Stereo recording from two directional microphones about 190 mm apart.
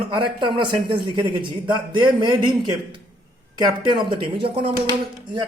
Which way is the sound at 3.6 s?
25° right (ahead or behind).